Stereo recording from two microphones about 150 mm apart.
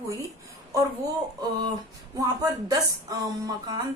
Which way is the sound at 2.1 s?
25° right (ahead or behind).